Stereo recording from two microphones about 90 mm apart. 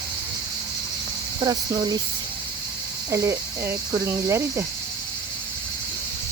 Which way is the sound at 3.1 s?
35° right (ahead or behind).